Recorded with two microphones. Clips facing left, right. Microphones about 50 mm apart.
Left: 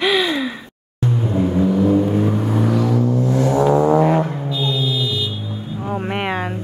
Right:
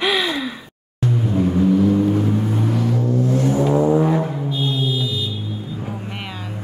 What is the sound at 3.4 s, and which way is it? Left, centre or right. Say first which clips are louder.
Vehicle: left 6 dB; left.